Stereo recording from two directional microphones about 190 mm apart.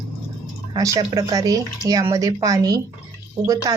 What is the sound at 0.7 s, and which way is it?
Speech, 20° right (ahead or behind).